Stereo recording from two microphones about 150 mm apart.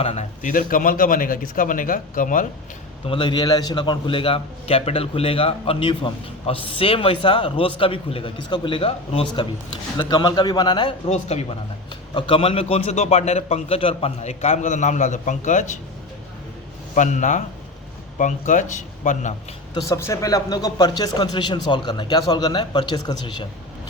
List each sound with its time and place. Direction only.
0.0 s a man's voice: 40° left (ahead or behind)
0.4 s speech: 65° left (ahead or behind)
3.1 s a man's voice: 30° left (ahead or behind)
11.1 s a man's voice: 45° left (ahead or behind)
16.9 s speech: 55° left (ahead or behind)
19.7 s speech: 20° left (ahead or behind)